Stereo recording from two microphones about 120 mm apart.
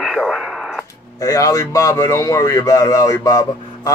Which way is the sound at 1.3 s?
30° left (ahead or behind).